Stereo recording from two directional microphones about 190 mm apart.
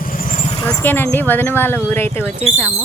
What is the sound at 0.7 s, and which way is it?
Speech, 10° left (ahead or behind).